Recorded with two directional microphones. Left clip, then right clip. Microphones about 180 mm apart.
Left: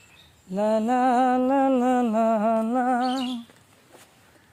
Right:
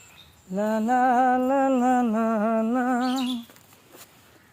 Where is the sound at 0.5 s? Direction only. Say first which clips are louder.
Left 1 dB; 50° left (ahead or behind).